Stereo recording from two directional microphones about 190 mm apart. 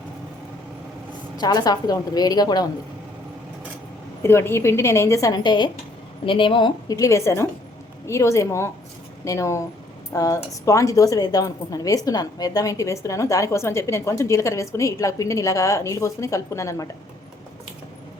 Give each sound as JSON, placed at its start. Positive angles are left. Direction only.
{"t": 1.4, "sound": "a woman's voice", "side_deg": 20}
{"t": 4.2, "sound": "a woman's voice", "side_deg": 15}